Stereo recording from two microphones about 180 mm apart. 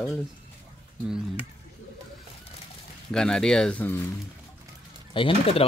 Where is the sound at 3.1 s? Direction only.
5° left (ahead or behind).